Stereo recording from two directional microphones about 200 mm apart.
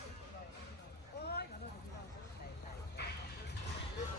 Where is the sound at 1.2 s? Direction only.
55° left (ahead or behind).